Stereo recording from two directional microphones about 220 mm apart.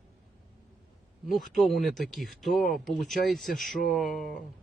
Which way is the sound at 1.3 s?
Centre (ahead or behind).